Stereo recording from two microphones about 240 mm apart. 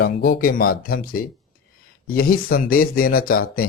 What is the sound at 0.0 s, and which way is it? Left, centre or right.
Speech, left.